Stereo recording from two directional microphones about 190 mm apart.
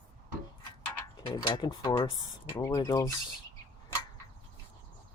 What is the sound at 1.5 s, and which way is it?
Speech, 25° left (ahead or behind).